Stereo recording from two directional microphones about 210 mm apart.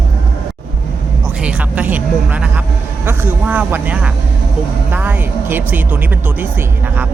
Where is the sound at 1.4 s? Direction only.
5° right (ahead or behind).